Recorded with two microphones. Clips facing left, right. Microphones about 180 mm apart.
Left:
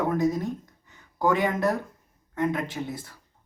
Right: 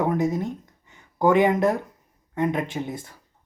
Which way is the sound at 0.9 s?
20° right (ahead or behind).